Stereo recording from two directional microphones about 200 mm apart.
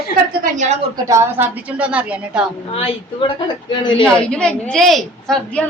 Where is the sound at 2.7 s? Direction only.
25° left (ahead or behind).